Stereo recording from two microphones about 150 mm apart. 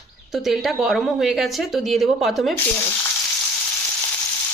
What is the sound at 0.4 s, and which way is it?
Speech, centre (ahead or behind).